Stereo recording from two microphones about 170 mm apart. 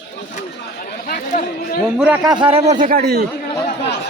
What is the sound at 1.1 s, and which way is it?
Chatter, 55° left (ahead or behind).